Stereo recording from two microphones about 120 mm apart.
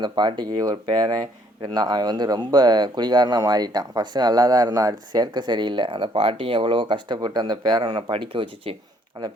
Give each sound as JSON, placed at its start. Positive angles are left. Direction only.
{"t": 0.0, "sound": "speech", "side_deg": -40}
{"t": 8.1, "sound": "speech", "side_deg": -45}